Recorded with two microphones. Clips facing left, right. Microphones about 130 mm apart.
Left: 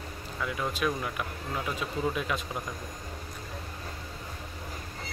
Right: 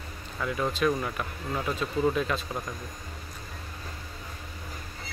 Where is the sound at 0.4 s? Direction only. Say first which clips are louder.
Right 3 dB; 5° left (ahead or behind).